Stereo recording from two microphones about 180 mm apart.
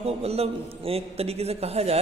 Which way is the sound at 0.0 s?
35° right (ahead or behind).